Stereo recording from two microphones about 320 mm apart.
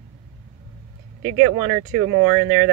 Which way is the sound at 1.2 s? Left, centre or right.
Right.